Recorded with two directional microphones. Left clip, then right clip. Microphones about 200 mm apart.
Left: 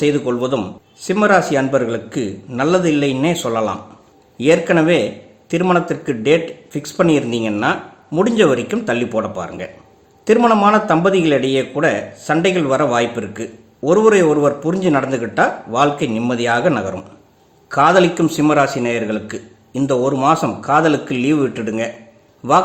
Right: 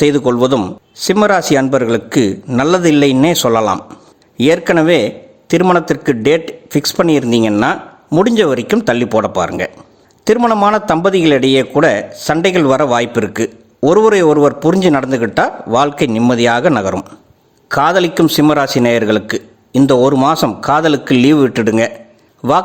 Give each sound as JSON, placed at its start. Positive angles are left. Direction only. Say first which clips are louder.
{"t": 0.0, "sound": "a man's voice", "louder": "right 6 dB", "side_deg": -45}